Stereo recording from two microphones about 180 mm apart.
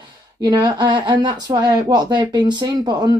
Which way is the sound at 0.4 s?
20° right (ahead or behind).